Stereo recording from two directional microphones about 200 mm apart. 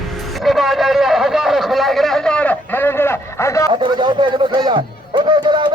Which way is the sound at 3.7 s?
25° right (ahead or behind).